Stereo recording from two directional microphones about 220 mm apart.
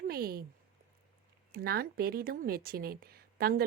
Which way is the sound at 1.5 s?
45° right (ahead or behind).